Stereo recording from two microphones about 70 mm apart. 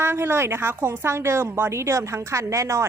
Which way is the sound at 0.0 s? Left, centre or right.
Right.